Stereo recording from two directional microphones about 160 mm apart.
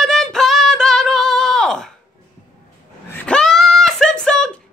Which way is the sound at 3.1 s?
5° left (ahead or behind).